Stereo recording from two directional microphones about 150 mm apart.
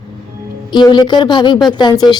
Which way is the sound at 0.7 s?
30° left (ahead or behind).